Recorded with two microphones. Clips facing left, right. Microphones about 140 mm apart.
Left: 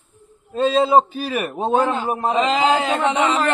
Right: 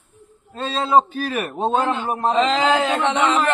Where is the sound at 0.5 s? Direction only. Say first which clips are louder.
Left 3 dB; 10° left (ahead or behind).